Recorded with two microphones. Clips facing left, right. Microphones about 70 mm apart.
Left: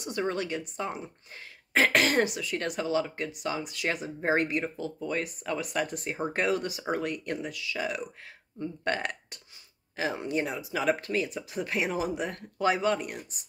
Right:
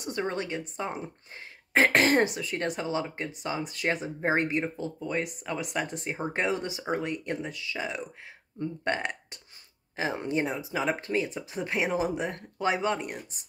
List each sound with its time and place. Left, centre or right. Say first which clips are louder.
0.0 s speech: left 1 dB; right
4.9 s speech: right 1 dB; centre